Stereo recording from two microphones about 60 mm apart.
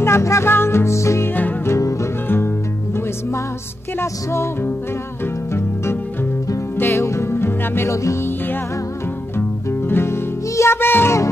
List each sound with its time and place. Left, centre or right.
0.0 s music: left
0.5 s music: left
2.2 s music: left
4.0 s music: left
6.9 s music: left
7.9 s music: left
9.7 s music: left